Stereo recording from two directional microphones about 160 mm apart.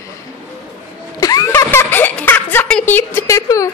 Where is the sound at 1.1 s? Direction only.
20° left (ahead or behind).